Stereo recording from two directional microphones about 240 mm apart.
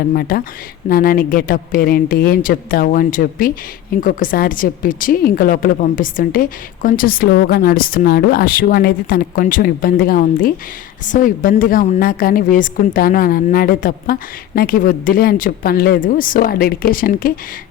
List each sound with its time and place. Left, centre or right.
0.1 s speech: left